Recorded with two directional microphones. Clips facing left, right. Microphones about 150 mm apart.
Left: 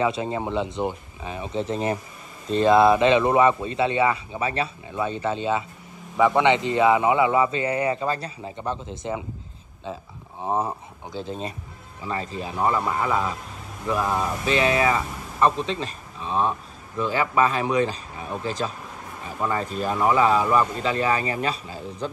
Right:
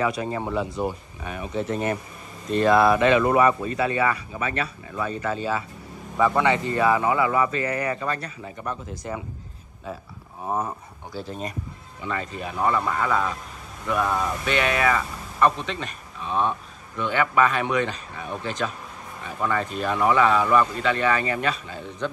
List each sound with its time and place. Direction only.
0.0 s speech: 25° left (ahead or behind)
10.4 s speech: 25° left (ahead or behind)
11.1 s speech: 5° right (ahead or behind)
12.0 s speech: 30° left (ahead or behind)